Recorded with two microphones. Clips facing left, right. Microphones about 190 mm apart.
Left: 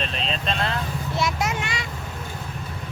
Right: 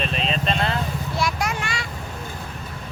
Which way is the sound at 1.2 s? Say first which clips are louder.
Even; 20° left (ahead or behind).